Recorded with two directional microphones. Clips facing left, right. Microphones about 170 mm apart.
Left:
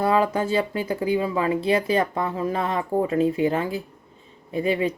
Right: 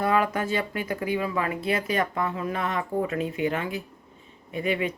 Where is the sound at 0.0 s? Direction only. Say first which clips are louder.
Left 3 dB; 30° left (ahead or behind).